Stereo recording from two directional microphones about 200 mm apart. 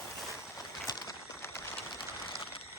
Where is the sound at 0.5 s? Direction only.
15° left (ahead or behind).